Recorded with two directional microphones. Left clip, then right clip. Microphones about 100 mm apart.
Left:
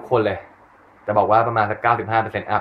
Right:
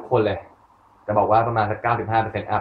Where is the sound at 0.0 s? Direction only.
15° left (ahead or behind).